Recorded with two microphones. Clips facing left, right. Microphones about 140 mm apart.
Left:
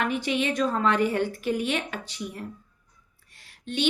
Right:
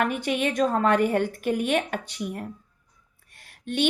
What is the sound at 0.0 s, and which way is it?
A woman's voice, 50° right (ahead or behind).